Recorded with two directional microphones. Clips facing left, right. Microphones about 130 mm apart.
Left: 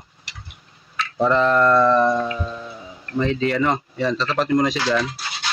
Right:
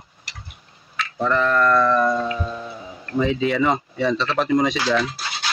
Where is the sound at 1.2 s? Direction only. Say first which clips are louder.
Left 3 dB; 20° left (ahead or behind).